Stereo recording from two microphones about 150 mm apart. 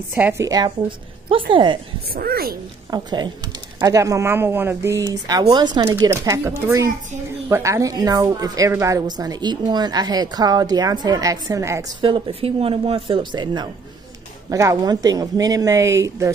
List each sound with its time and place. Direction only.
0.1 s a woman's voice: 15° right (ahead or behind); by 1.8 s 35° right (ahead or behind)
2.1 s speech: 90° right
2.9 s a woman's voice: 30° right (ahead or behind)
12.0 s a woman's voice: 35° right (ahead or behind); by 16.3 s 20° right (ahead or behind)